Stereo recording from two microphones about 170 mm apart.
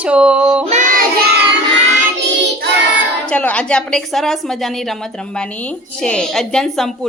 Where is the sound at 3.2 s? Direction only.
10° left (ahead or behind).